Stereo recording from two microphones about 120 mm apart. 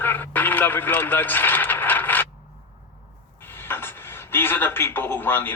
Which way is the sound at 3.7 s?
20° left (ahead or behind).